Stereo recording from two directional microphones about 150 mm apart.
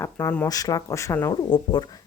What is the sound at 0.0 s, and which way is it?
Speech, 15° left (ahead or behind).